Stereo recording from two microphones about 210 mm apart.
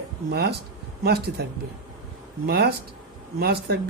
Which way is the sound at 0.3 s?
50° right (ahead or behind).